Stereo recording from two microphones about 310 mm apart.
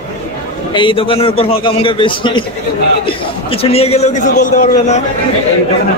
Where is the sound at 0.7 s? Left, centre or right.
Centre.